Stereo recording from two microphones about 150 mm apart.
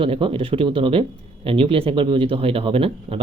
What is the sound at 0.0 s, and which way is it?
Speech, 35° right (ahead or behind).